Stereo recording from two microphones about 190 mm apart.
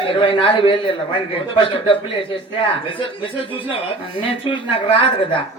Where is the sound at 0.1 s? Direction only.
25° left (ahead or behind).